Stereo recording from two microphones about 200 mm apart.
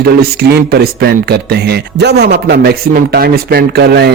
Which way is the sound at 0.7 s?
50° right (ahead or behind).